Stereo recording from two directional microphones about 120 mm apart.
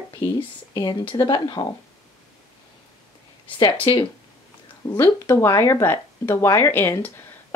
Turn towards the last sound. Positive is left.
turn(degrees=20)  # may be behind; listen again after turning